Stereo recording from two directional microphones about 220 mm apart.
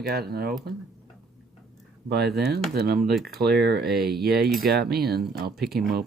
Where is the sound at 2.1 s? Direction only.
50° right (ahead or behind).